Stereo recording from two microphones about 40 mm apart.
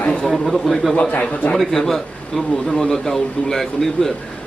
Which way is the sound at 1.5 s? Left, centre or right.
Centre.